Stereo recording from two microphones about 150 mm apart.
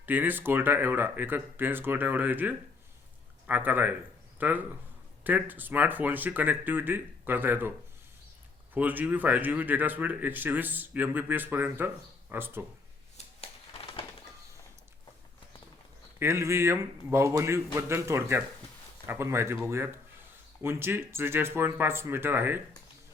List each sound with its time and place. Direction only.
0.0 s speech: 10° right (ahead or behind)
8.7 s speech: 10° right (ahead or behind)
13.2 s a sound: 45° left (ahead or behind)
16.1 s speech: 15° right (ahead or behind)